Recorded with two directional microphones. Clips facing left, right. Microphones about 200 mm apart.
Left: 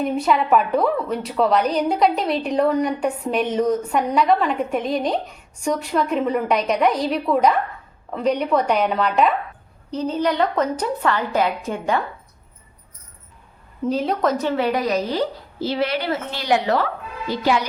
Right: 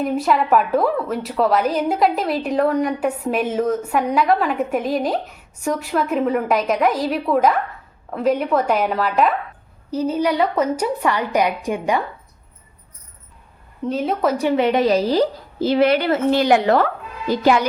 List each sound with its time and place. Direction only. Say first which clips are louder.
0.0 s a woman's voice: right 1 dB; centre (ahead or behind)
13.8 s a woman's voice: even; centre (ahead or behind); by 15.7 s 35° right (ahead or behind)
15.7 s a woman's voice: right 7 dB; 50° right (ahead or behind)